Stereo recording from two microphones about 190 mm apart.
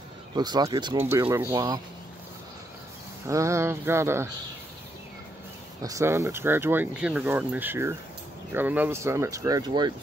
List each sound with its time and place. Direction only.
0.4 s speech: 20° right (ahead or behind)
3.3 s speech: 15° right (ahead or behind)
5.8 s speech: 15° right (ahead or behind)